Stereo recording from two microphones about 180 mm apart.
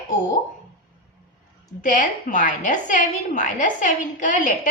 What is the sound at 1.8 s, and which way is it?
A woman's voice, 45° left (ahead or behind).